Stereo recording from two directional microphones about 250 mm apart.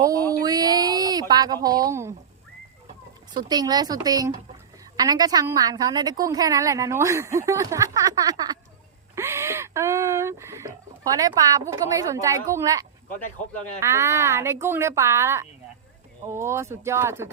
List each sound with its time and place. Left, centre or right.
0.0 s a sound: centre
1.3 s a woman's voice: centre
3.3 s a woman's voice: centre